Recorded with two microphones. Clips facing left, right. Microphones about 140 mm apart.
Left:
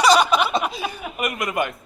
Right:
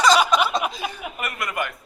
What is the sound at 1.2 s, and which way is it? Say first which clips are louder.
Speech: left 5 dB; 15° left (ahead or behind).